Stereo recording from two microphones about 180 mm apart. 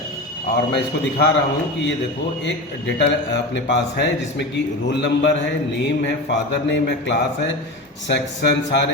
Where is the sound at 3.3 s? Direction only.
75° left (ahead or behind).